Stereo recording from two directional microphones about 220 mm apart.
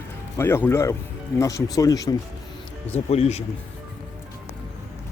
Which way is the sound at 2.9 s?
30° left (ahead or behind).